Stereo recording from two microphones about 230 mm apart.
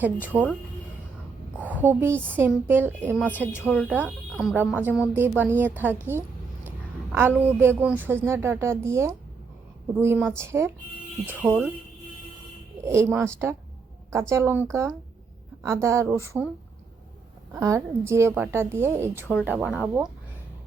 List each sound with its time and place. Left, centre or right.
0.0 s speech: centre
1.5 s a sound: centre
2.3 s a woman's voice: centre
12.8 s speech: centre
17.5 s speech: centre